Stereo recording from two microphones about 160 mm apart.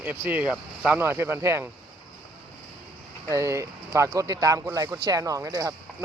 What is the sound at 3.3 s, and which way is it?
Speech, 20° right (ahead or behind).